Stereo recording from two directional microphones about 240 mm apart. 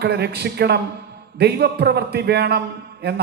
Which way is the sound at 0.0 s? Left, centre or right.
Right.